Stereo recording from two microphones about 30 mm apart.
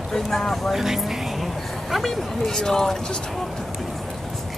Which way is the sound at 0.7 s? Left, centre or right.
Centre.